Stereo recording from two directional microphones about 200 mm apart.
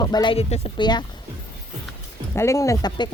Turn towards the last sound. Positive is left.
turn(degrees=20)  # may be behind; listen again after turning